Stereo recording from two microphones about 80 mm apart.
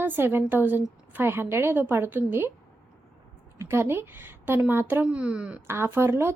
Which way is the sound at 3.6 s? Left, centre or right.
Right.